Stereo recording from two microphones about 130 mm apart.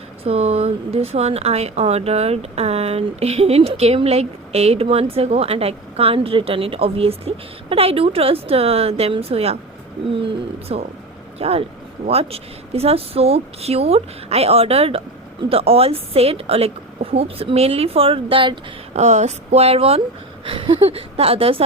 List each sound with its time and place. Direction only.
0.3 s speech: 55° right (ahead or behind)
10.7 s speech: 50° right (ahead or behind)
18.9 s speech: 65° right (ahead or behind); by 21.6 s 45° right (ahead or behind)